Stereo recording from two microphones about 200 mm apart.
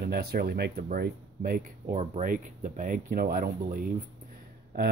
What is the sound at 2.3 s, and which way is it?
Speech, 40° right (ahead or behind).